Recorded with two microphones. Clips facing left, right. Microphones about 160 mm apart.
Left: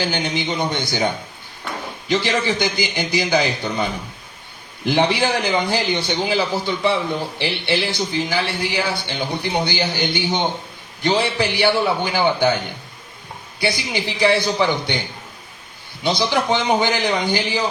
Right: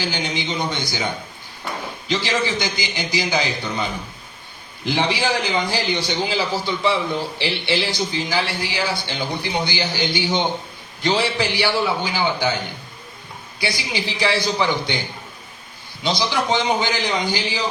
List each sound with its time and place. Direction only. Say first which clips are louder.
0.0 s a man's voice: left 3 dB; 55° left (ahead or behind)
4.9 s a man's voice: left 3 dB; 55° left (ahead or behind)
13.6 s a man's voice: left 3 dB; 55° left (ahead or behind)
16.0 s a man's voice: left 2 dB; 55° left (ahead or behind)